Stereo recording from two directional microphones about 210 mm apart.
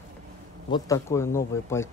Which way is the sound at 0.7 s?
15° left (ahead or behind).